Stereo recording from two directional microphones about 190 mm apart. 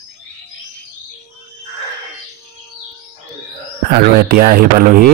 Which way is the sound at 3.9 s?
50° right (ahead or behind).